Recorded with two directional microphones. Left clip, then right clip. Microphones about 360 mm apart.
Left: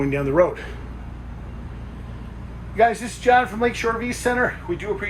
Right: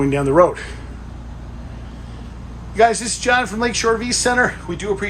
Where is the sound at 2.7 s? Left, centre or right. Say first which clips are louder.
Right 4 dB; centre.